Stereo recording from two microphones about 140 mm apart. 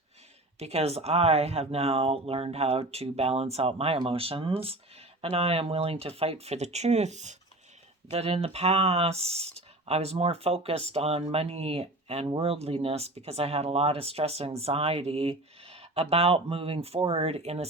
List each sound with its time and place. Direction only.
0.6 s speech: 45° right (ahead or behind)